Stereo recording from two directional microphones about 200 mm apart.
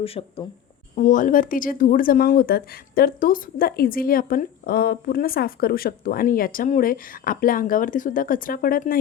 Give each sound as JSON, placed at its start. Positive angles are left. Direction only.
{"t": 0.0, "sound": "speech", "side_deg": 30}
{"t": 0.9, "sound": "speech", "side_deg": 40}